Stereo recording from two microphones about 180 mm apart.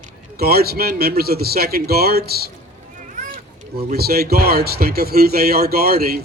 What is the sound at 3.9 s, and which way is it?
A man's voice, 60° right (ahead or behind).